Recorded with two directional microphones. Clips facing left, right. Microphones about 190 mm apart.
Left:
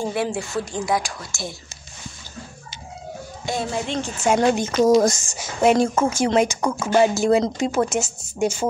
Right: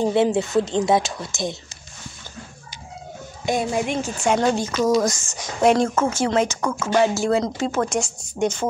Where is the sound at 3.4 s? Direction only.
15° right (ahead or behind).